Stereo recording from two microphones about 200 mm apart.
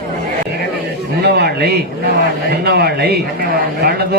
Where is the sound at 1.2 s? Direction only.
55° right (ahead or behind).